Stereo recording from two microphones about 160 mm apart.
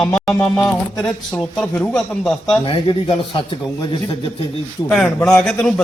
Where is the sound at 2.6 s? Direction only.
30° left (ahead or behind).